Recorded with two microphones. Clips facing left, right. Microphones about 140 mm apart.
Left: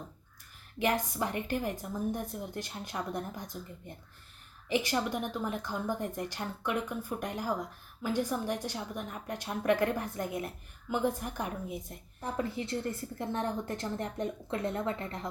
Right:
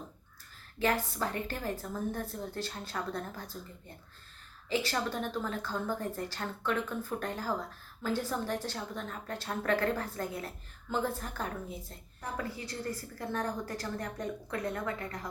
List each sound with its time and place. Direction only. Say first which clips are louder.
0.8 s a woman's voice: left 1 dB; 15° left (ahead or behind)